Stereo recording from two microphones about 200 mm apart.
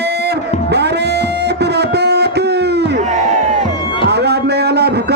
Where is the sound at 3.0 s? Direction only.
35° right (ahead or behind).